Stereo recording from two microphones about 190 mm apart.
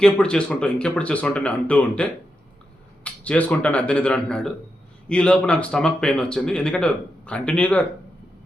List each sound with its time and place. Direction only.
0.0 s speech: 5° left (ahead or behind)